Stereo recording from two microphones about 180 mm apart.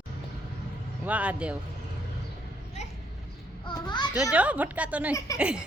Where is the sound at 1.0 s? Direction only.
10° right (ahead or behind).